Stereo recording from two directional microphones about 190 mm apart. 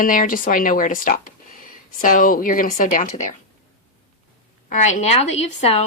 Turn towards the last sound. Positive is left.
turn(degrees=35)  # may be behind; listen again after turning